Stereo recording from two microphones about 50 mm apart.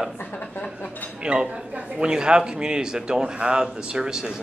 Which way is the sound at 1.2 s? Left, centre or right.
Centre.